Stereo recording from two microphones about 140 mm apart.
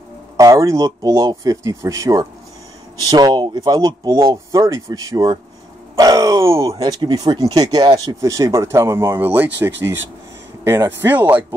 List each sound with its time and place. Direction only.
0.4 s speech: 25° right (ahead or behind)